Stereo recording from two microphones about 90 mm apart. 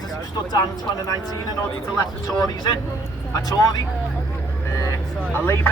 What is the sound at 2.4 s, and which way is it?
Speech, 50° left (ahead or behind).